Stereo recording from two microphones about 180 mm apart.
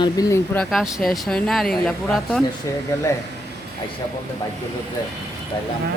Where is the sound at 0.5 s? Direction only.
Centre (ahead or behind).